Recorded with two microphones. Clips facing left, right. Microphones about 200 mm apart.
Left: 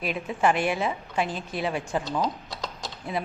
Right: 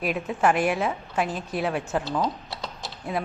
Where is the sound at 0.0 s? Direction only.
5° right (ahead or behind).